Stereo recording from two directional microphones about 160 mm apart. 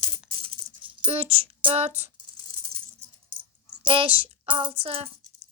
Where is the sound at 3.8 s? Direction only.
35° right (ahead or behind).